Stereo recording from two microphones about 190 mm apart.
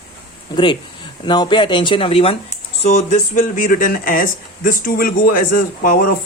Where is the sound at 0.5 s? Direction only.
25° left (ahead or behind).